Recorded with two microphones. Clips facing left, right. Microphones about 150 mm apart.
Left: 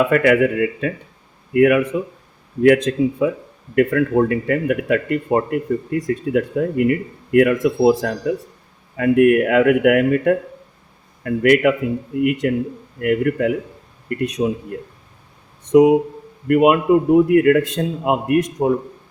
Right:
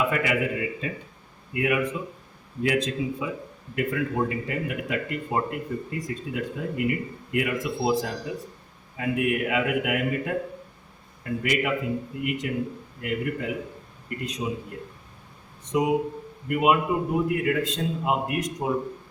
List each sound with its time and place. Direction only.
0.1 s speech: 60° left (ahead or behind)
15.7 s speech: 65° left (ahead or behind)